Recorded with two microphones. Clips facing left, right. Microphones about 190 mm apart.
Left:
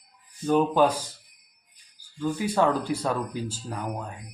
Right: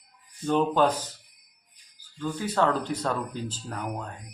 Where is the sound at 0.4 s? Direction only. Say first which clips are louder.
Left 2 dB; 10° left (ahead or behind).